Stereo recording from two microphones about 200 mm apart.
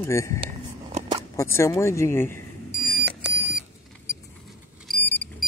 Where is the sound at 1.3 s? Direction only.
15° left (ahead or behind).